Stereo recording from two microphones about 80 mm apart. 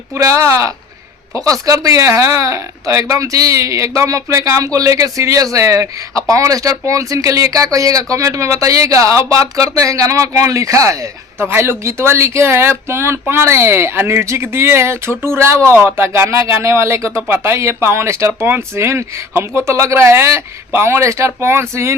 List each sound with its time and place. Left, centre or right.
0.2 s speech: right
11.3 s speech: right